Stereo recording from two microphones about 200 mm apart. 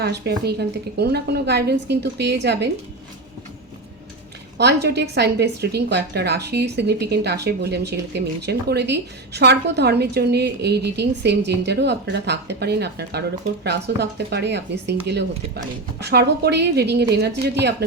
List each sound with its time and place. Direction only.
0.0 s a woman's voice: 55° right (ahead or behind)
4.5 s speech: 55° right (ahead or behind)